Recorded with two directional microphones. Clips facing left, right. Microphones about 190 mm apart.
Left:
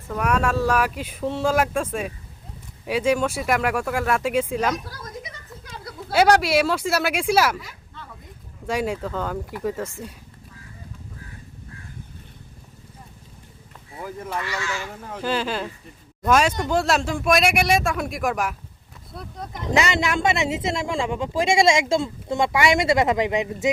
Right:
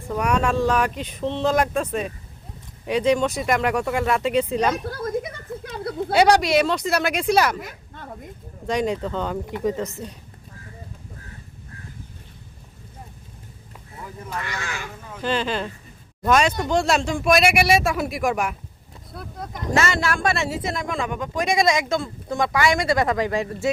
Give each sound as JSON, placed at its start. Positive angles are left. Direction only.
{"t": 0.2, "sound": "speech", "side_deg": 5}
{"t": 4.9, "sound": "a sound", "side_deg": -55}
{"t": 6.1, "sound": "speech", "side_deg": 5}
{"t": 7.6, "sound": "a sound", "side_deg": -50}
{"t": 8.6, "sound": "speech", "side_deg": 5}
{"t": 14.4, "sound": "speech", "side_deg": -55}
{"t": 15.2, "sound": "speech", "side_deg": 5}
{"t": 19.7, "sound": "speech", "side_deg": 20}